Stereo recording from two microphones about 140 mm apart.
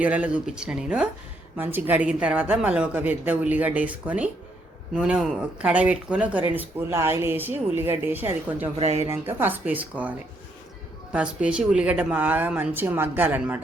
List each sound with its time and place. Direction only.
0.0 s a woman's voice: 10° right (ahead or behind)
8.7 s speech: 50° right (ahead or behind)
9.0 s a woman's voice: 15° right (ahead or behind)